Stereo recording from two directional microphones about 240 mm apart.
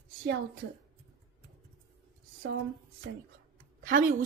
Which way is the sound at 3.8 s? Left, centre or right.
Right.